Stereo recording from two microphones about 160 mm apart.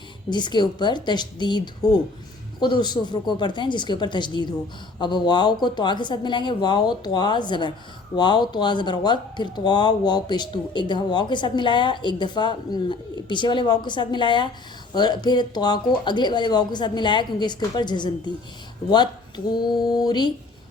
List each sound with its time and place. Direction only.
0.3 s speech: 25° left (ahead or behind)
19.5 s speech: 25° left (ahead or behind)